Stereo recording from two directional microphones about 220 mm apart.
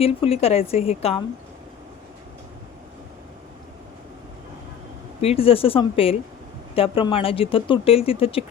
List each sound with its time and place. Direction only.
0.0 s speech: 25° left (ahead or behind)
5.2 s speech: 25° left (ahead or behind)